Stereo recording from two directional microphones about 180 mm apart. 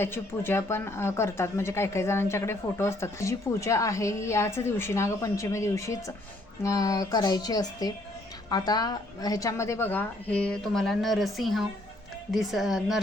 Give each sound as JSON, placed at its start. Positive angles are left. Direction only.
{"t": 0.0, "sound": "speech", "side_deg": 15}